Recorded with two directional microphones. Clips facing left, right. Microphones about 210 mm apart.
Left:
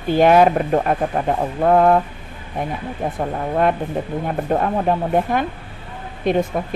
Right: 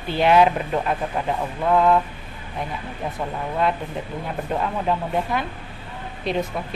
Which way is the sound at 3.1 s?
50° left (ahead or behind).